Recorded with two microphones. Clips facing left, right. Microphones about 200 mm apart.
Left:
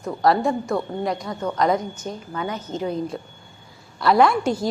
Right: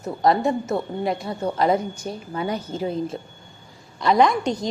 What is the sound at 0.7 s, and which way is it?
A woman's voice, 25° right (ahead or behind).